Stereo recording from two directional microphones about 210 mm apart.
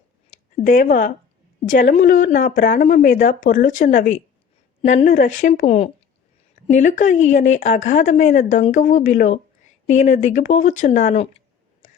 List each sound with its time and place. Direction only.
0.6 s speech: 40° left (ahead or behind)